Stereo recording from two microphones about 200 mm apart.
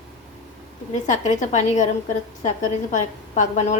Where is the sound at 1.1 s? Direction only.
35° left (ahead or behind).